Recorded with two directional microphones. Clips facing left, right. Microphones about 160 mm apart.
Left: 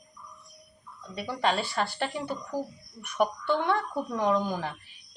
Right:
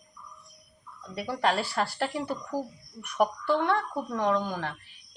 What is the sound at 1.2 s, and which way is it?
A woman's voice, 5° right (ahead or behind).